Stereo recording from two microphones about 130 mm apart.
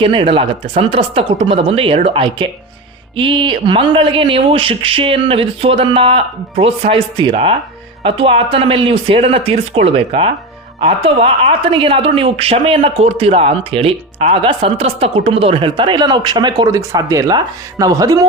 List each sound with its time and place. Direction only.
0.0 s a woman's voice: 40° right (ahead or behind)